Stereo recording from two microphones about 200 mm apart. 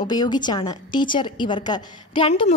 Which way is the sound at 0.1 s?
20° left (ahead or behind).